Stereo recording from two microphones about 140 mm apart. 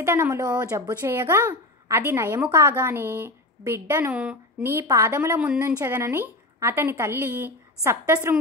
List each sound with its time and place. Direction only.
0.0 s a child's voice: 15° right (ahead or behind)